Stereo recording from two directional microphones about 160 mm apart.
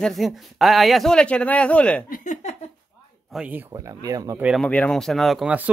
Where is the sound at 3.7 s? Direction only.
20° right (ahead or behind).